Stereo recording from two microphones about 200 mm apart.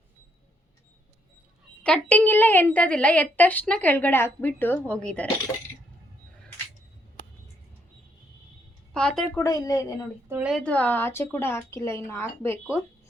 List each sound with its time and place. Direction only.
1.8 s a woman's voice: 5° left (ahead or behind)
8.9 s a woman's voice: 5° left (ahead or behind)
9.4 s a woman's voice: 15° left (ahead or behind)
10.2 s a woman's voice: 5° right (ahead or behind)
10.6 s a woman's voice: 5° left (ahead or behind)